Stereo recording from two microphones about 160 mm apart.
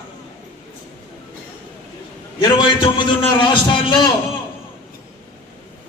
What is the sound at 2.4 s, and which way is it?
A man's voice, 30° left (ahead or behind).